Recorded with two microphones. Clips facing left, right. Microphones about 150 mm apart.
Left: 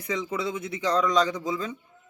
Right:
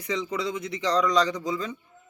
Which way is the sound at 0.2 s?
5° left (ahead or behind).